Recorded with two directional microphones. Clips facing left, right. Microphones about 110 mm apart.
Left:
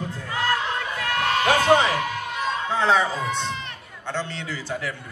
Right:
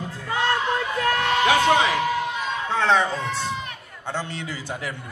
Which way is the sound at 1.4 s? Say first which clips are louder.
Right 2 dB; 40° left (ahead or behind).